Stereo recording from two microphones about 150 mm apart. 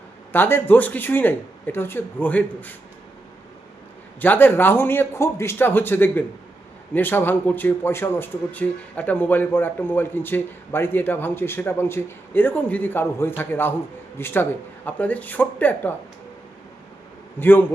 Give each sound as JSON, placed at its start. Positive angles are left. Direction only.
{"t": 0.3, "sound": "speech", "side_deg": 15}
{"t": 4.2, "sound": "speech", "side_deg": 10}
{"t": 17.4, "sound": "speech", "side_deg": 15}